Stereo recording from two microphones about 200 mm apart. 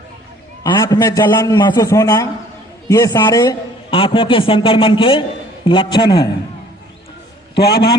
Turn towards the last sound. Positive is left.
turn(degrees=50)  # may be behind; listen again after turning